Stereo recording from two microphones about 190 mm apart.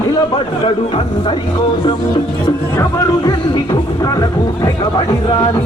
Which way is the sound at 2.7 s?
20° left (ahead or behind).